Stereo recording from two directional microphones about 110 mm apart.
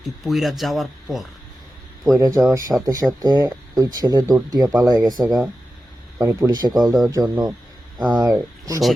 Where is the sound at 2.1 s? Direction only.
30° right (ahead or behind).